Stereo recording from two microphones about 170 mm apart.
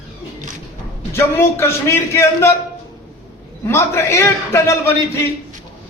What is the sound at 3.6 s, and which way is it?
A man's voice, 15° left (ahead or behind).